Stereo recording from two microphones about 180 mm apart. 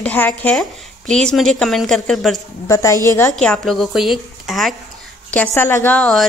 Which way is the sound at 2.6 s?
15° left (ahead or behind).